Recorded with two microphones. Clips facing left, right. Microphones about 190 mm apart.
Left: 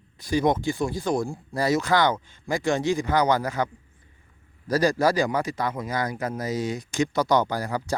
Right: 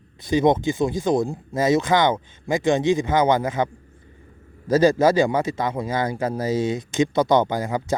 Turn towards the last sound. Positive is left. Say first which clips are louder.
# right 4 dB
turn(degrees=-20)  # may be behind; listen again after turning